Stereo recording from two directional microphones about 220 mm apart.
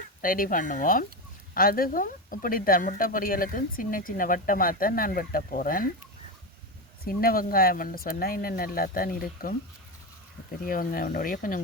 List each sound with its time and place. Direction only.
0.2 s speech: 40° left (ahead or behind)
7.0 s speech: 40° left (ahead or behind)
10.6 s speech: 40° left (ahead or behind)